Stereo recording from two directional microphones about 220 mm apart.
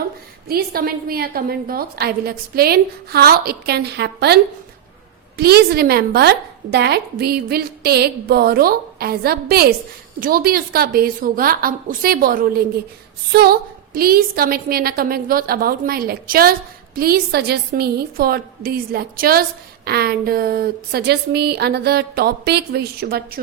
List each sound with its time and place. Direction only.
0.4 s a woman's voice: 45° right (ahead or behind)
5.4 s a woman's voice: 45° right (ahead or behind)